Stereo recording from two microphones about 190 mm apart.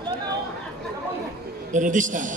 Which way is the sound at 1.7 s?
45° right (ahead or behind).